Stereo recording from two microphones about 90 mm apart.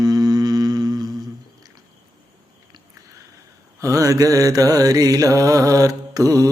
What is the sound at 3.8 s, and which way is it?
Mantra, 35° right (ahead or behind).